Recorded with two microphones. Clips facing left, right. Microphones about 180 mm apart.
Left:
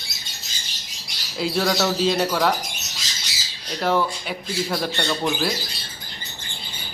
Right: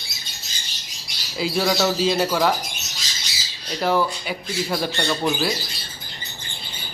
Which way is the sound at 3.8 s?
Centre (ahead or behind).